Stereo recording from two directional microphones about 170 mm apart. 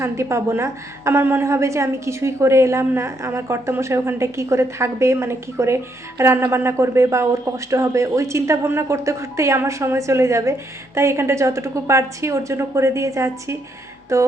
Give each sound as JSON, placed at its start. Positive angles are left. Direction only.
{"t": 0.0, "sound": "a woman's voice", "side_deg": -15}